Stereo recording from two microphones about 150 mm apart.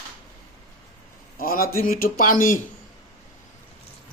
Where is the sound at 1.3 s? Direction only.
70° left (ahead or behind).